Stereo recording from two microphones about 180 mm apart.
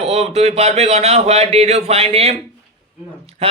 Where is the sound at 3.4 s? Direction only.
35° right (ahead or behind).